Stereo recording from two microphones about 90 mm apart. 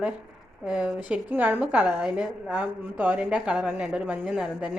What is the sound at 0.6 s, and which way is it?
A woman's voice, 10° right (ahead or behind).